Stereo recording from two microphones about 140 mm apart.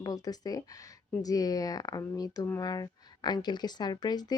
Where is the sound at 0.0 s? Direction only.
25° left (ahead or behind).